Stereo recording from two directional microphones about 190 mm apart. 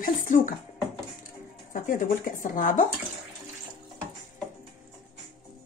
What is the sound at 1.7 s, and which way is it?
Speech, 45° left (ahead or behind).